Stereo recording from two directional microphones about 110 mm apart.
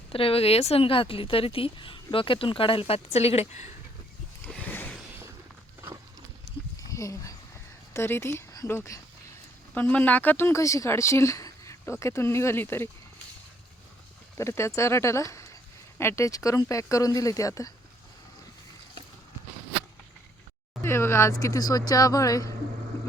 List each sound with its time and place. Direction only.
0.1 s speech: 60° left (ahead or behind)
4.4 s a sound: 15° left (ahead or behind)
6.7 s a sound: 30° left (ahead or behind)
7.9 s speech: 20° left (ahead or behind)
14.3 s speech: 25° left (ahead or behind)
20.8 s speech: 25° left (ahead or behind)